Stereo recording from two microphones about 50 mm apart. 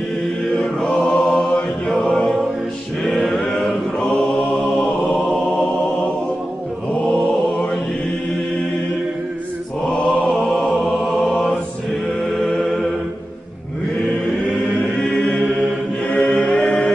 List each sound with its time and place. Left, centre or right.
0.6 s chant: left
2.0 s music: centre
3.3 s chant: centre
7.1 s mantra: left
9.8 s mantra: left
10.5 s music: centre
10.9 s music: centre
11.2 s mantra: centre
12.6 s music: centre
14.8 s choir: centre